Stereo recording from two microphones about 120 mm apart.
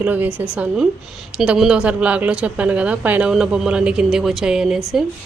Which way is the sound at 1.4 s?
5° right (ahead or behind).